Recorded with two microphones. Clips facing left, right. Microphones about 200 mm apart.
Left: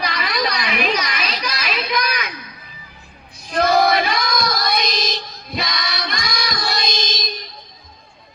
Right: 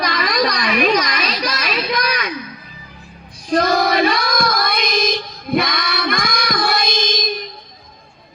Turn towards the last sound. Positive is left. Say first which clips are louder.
# right 5 dB
turn(degrees=-55)  # may be behind; listen again after turning